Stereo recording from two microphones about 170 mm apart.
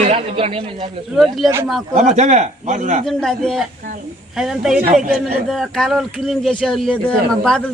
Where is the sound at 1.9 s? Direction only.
45° right (ahead or behind).